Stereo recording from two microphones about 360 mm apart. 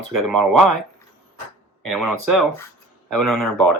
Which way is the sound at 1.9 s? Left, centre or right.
Centre.